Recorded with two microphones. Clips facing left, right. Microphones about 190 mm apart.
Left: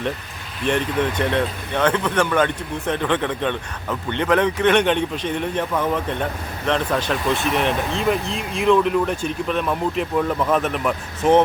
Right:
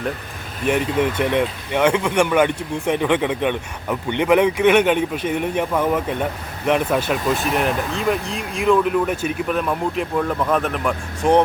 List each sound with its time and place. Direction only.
0.6 s speech: 10° right (ahead or behind)